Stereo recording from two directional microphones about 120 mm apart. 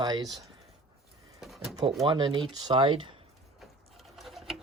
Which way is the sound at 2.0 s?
40° right (ahead or behind).